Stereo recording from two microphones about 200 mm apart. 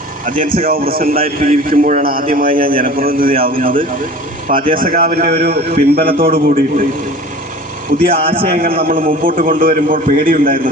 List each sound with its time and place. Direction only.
0.3 s a man's voice: 45° right (ahead or behind)
6.2 s a man's voice: 35° right (ahead or behind)
8.0 s a man's voice: 30° right (ahead or behind)
8.8 s a man's voice: 45° right (ahead or behind)